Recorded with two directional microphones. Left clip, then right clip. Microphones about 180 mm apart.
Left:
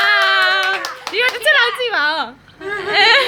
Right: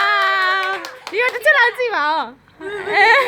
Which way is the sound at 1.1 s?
30° right (ahead or behind).